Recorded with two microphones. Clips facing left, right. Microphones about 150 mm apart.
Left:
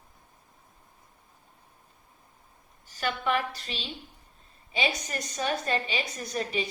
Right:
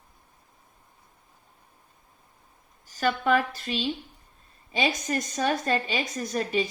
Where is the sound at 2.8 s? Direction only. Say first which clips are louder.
Right 5 dB; 40° right (ahead or behind).